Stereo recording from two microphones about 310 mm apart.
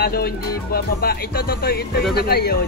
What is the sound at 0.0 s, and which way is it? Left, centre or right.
Music, left.